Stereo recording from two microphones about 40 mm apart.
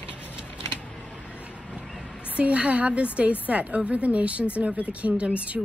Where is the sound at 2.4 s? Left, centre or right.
Right.